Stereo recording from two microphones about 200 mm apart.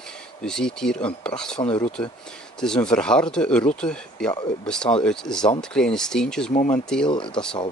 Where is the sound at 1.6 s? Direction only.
25° left (ahead or behind).